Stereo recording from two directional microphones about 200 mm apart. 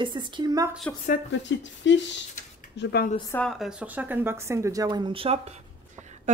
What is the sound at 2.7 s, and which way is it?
Speech, 50° left (ahead or behind).